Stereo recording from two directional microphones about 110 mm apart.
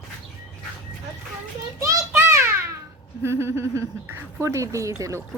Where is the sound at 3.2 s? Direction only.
25° right (ahead or behind).